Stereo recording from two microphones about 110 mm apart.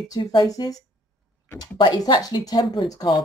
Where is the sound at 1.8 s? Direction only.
40° left (ahead or behind).